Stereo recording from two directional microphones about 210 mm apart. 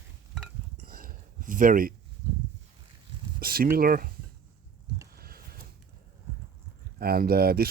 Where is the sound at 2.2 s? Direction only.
15° right (ahead or behind).